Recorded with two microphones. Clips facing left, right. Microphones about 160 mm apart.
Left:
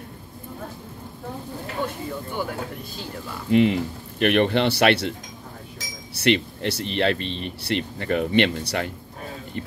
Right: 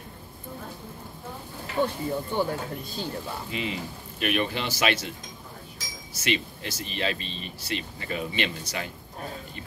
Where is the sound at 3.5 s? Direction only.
60° left (ahead or behind).